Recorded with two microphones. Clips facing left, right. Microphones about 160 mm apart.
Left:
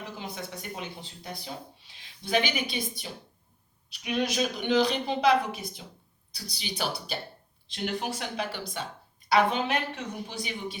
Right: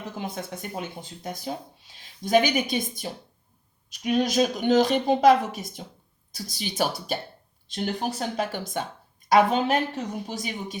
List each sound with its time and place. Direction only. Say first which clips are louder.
0.2 s a woman's voice: right 5 dB; 50° right (ahead or behind)
7.7 s a woman's voice: right 3 dB; 35° right (ahead or behind)